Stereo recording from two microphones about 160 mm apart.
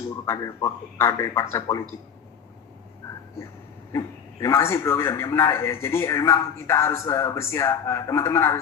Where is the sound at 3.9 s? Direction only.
20° left (ahead or behind).